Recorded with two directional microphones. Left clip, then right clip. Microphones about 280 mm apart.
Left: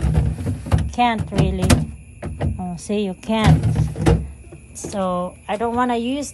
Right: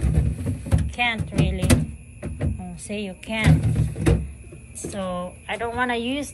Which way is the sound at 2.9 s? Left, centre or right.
Centre.